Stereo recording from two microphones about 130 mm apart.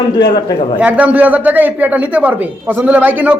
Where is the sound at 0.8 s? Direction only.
10° right (ahead or behind).